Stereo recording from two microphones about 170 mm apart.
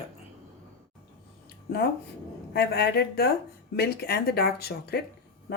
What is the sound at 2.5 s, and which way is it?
Speech, 70° left (ahead or behind).